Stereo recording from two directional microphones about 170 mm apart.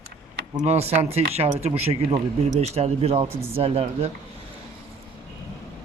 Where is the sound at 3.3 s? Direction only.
15° right (ahead or behind).